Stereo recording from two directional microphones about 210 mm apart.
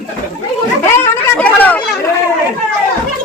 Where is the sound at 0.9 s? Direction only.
10° left (ahead or behind).